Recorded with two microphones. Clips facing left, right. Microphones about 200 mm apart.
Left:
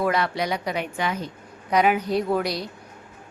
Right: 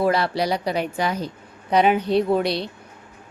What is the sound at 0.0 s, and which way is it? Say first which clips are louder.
A woman's voice: right 3 dB; 35° right (ahead or behind).